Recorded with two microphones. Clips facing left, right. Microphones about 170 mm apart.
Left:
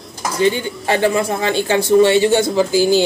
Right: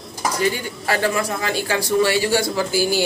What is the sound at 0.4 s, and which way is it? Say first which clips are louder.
Speech: left 8 dB; 25° left (ahead or behind).